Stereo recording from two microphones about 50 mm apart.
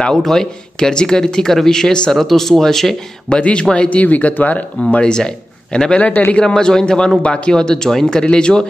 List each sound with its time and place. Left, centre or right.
0.2 s speech: centre
3.3 s speech: left
3.9 s speech: left
5.0 s a man's voice: centre
6.3 s speech: centre